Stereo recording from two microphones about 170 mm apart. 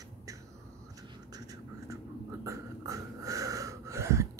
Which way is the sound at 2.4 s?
20° right (ahead or behind).